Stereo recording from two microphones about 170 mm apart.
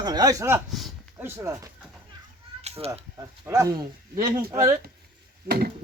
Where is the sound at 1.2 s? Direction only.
15° right (ahead or behind).